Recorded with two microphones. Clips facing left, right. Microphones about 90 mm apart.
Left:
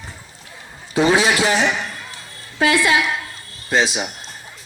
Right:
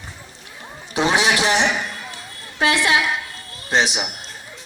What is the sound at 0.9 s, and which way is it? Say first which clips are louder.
A man's voice: left 3 dB; 20° right (ahead or behind).